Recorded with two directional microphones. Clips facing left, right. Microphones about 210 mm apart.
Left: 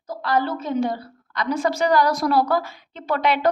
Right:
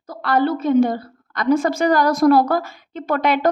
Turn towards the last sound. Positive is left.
turn(degrees=-45)  # may be behind; listen again after turning